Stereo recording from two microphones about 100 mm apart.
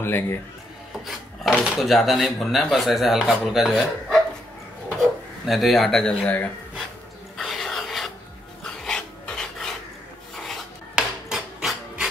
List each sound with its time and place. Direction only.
0.0 s a man's voice: 25° left (ahead or behind)
1.0 s speech: 5° right (ahead or behind); by 6.5 s 15° left (ahead or behind)
7.3 s a sound: centre (ahead or behind)
8.6 s filing: 5° left (ahead or behind)